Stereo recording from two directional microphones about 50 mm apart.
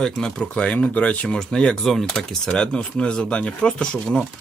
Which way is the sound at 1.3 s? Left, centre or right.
Centre.